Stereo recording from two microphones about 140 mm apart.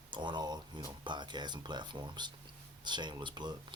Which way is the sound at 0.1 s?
35° right (ahead or behind).